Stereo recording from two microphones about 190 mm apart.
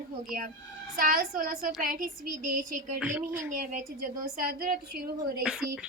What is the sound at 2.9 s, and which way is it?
Speech, 10° right (ahead or behind).